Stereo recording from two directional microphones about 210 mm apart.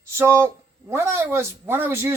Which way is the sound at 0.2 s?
10° right (ahead or behind).